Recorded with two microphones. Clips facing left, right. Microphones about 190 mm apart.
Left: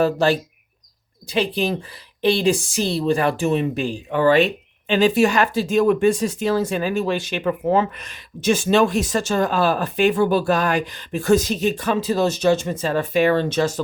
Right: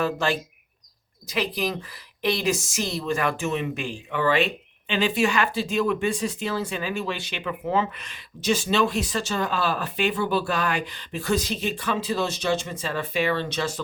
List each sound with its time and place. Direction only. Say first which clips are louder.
0.0 s speech: left 7 dB; 35° left (ahead or behind)